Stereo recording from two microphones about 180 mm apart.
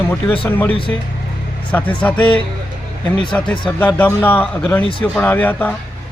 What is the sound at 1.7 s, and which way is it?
Speech, 10° left (ahead or behind).